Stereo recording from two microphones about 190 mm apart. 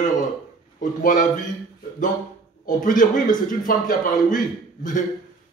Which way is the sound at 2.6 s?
45° left (ahead or behind).